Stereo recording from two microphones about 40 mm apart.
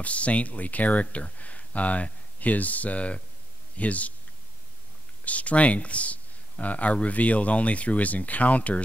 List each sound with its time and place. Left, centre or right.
0.0 s speech: left
5.2 s speech: left